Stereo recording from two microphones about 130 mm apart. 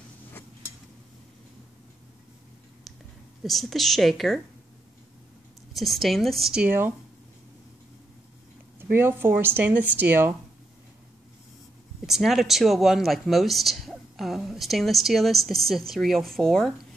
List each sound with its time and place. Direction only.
3.4 s speech: centre (ahead or behind)
5.8 s speech: centre (ahead or behind)
8.9 s speech: 15° right (ahead or behind)
12.1 s speech: centre (ahead or behind)